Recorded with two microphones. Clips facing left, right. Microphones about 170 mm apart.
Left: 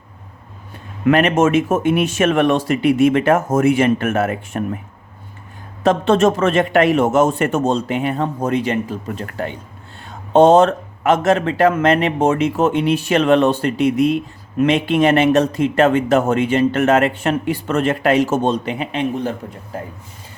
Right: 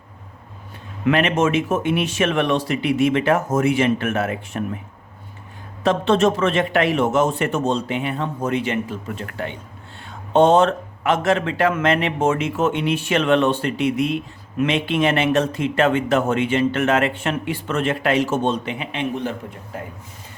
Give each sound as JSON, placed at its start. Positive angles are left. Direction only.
{"t": 1.0, "sound": "speech", "side_deg": 45}
{"t": 5.8, "sound": "speech", "side_deg": 45}